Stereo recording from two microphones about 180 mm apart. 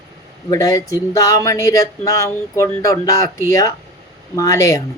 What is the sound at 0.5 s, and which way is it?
Speech, 20° left (ahead or behind).